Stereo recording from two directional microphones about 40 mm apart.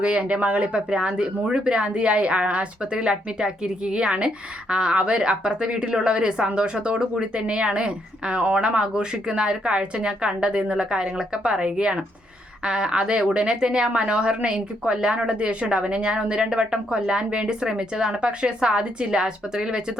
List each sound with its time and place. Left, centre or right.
0.0 s speech: right
0.9 s a woman's voice: right